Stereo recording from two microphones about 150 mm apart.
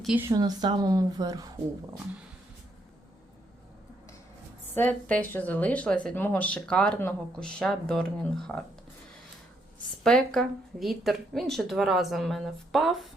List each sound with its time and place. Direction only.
0.3 s speech: 25° right (ahead or behind)
4.7 s speech: 10° left (ahead or behind)
10.0 s a woman's voice: 5° left (ahead or behind)